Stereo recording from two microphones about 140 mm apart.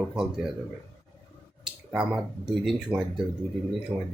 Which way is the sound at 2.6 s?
5° right (ahead or behind).